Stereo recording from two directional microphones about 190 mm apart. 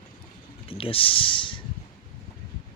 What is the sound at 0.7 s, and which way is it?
Speech, 30° left (ahead or behind).